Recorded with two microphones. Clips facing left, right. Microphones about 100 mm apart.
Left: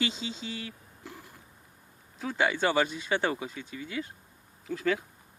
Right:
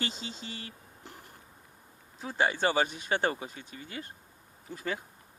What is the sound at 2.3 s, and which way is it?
Speech, 45° right (ahead or behind).